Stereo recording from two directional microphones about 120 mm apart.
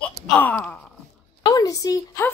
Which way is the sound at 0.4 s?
15° left (ahead or behind).